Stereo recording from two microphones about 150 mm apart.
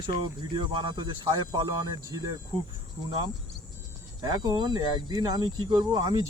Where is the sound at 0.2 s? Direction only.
30° right (ahead or behind).